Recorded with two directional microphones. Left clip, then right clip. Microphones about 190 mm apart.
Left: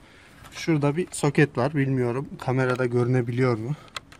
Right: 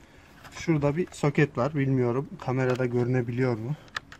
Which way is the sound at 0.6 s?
50° left (ahead or behind).